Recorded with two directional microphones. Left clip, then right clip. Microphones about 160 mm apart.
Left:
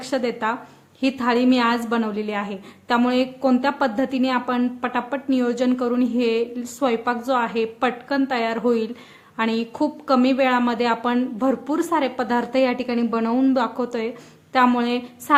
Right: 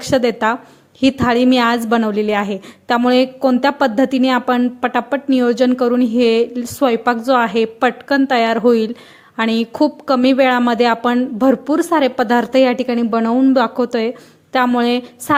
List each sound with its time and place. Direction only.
0.0 s speech: 45° right (ahead or behind)